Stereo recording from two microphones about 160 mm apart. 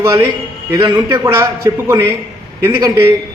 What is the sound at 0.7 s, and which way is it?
Speech, 25° right (ahead or behind).